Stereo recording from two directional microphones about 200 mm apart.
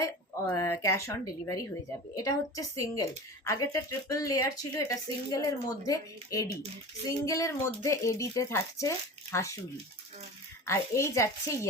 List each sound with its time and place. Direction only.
0.0 s a woman's voice: 15° left (ahead or behind)
10.7 s a woman's voice: 15° left (ahead or behind)